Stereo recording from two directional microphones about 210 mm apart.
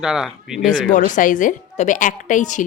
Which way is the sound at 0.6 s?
40° left (ahead or behind).